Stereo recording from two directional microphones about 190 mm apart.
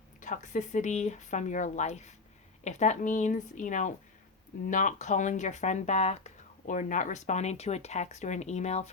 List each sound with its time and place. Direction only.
0.2 s speech: 40° left (ahead or behind)